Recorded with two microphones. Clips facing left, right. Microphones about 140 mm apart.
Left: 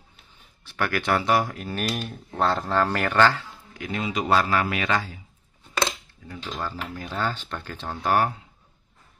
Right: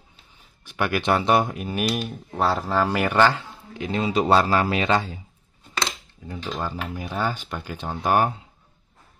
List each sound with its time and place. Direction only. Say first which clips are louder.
0.7 s speech: right 2 dB; 15° right (ahead or behind)
6.2 s speech: right 3 dB; 20° right (ahead or behind)